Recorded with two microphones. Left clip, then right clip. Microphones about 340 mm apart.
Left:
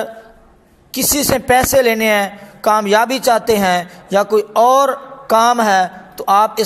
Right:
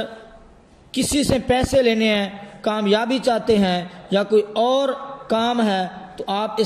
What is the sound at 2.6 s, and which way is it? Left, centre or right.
A man's voice, left.